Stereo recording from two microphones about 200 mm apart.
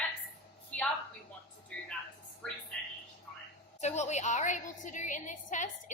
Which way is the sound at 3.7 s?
35° left (ahead or behind).